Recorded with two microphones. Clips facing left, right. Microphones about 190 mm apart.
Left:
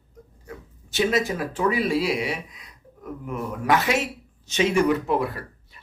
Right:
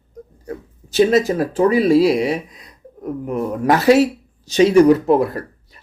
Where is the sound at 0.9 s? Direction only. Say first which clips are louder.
Right 9 dB; 40° right (ahead or behind).